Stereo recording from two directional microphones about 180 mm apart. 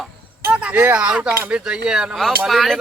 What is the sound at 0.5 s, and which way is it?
Speech, 10° right (ahead or behind).